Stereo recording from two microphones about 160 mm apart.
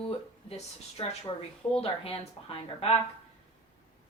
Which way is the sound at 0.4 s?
40° left (ahead or behind).